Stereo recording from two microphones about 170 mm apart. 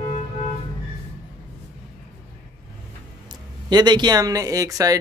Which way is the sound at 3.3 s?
25° right (ahead or behind).